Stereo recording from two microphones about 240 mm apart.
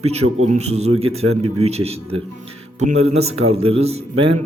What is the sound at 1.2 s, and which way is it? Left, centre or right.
Speech, right.